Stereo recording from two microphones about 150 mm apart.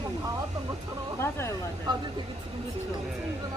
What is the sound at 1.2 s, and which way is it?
Speech, 15° left (ahead or behind).